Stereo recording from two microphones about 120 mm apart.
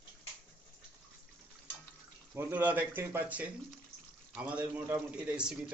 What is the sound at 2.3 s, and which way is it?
A man's voice, 20° right (ahead or behind).